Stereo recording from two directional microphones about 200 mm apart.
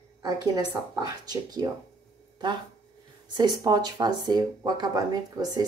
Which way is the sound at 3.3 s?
20° right (ahead or behind).